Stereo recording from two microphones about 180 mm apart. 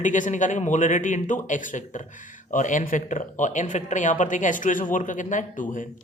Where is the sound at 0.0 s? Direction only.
45° left (ahead or behind).